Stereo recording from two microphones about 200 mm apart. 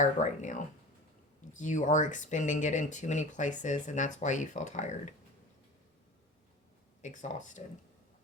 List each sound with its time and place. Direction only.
0.0 s speech: 40° left (ahead or behind)
7.0 s speech: 40° left (ahead or behind)